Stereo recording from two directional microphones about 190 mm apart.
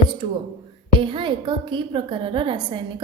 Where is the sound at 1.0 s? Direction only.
25° right (ahead or behind).